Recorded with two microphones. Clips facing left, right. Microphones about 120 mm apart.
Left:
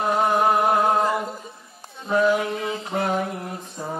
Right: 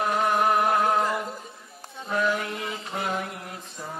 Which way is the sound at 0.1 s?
30° left (ahead or behind).